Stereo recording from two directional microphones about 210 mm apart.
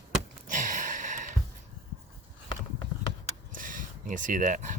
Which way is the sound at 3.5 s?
40° right (ahead or behind).